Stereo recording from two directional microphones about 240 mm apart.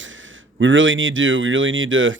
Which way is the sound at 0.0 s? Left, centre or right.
Right.